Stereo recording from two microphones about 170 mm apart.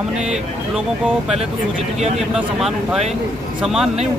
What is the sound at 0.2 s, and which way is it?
Speech, 5° right (ahead or behind).